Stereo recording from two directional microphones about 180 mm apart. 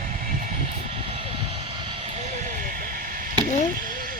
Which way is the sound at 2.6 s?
50° right (ahead or behind).